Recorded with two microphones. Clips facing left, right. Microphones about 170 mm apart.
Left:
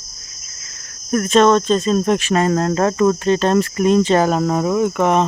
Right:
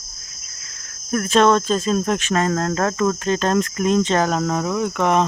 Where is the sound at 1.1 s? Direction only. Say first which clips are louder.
Left 3 dB; centre (ahead or behind).